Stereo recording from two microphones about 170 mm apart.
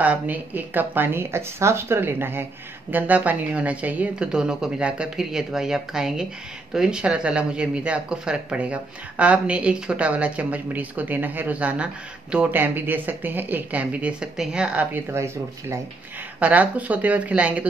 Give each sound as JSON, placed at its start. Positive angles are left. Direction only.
{"t": 0.0, "sound": "a woman's voice", "side_deg": -10}